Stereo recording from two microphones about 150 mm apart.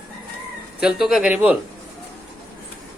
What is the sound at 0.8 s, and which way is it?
Speech, 5° right (ahead or behind).